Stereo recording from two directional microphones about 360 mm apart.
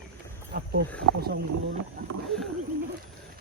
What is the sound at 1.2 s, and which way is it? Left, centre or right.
Speech, right.